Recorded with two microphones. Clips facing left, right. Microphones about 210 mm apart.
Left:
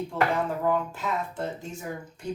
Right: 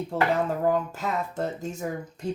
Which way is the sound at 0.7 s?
40° right (ahead or behind).